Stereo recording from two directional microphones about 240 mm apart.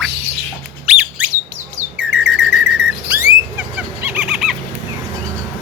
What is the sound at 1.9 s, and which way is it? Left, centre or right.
Bird, centre.